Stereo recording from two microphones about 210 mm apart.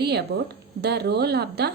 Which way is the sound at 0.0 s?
50° right (ahead or behind).